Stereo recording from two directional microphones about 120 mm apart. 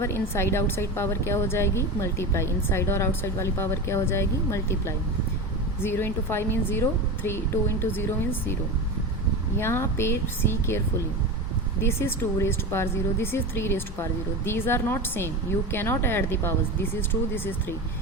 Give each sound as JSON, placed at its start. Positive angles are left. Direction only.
{"t": 0.0, "sound": "a woman's voice", "side_deg": 20}
{"t": 9.6, "sound": "a woman's voice", "side_deg": 20}
{"t": 11.8, "sound": "a woman's voice", "side_deg": 20}